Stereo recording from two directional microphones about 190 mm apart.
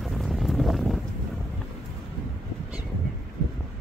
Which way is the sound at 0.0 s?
Centre (ahead or behind).